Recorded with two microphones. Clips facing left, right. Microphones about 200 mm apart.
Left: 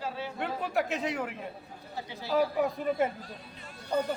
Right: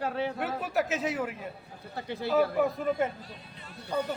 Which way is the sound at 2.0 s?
60° right (ahead or behind).